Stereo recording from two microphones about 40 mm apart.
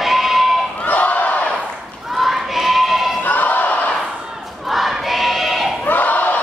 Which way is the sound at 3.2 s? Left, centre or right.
Left.